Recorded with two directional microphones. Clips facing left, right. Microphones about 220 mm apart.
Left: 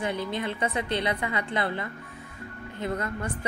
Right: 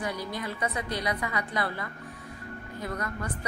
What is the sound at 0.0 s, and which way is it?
Speech, 25° left (ahead or behind).